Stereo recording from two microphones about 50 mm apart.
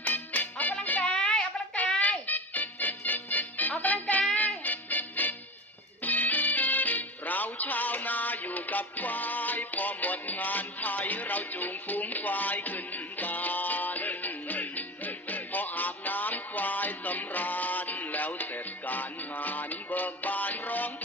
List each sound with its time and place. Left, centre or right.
0.0 s music: left
1.0 s a sound: centre
2.0 s music: left